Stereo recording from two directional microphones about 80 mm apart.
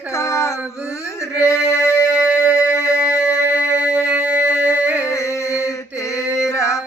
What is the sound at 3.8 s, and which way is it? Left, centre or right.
Music, centre.